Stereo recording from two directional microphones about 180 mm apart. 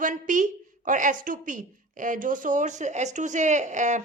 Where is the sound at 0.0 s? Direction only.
45° right (ahead or behind).